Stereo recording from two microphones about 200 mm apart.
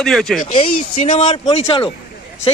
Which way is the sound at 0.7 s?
35° left (ahead or behind).